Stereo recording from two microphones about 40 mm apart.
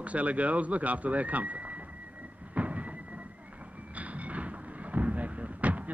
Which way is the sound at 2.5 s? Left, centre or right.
Right.